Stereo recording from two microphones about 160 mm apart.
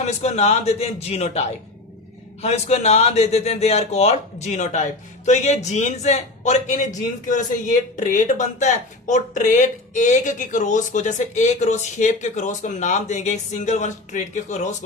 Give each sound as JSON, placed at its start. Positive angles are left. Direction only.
{"t": 0.0, "sound": "a man's voice", "side_deg": 45}